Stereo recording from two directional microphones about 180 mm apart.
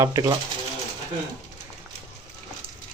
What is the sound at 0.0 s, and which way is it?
Speech, 20° right (ahead or behind).